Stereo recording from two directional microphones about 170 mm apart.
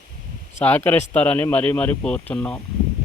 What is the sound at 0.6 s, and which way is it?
Speech, 10° left (ahead or behind).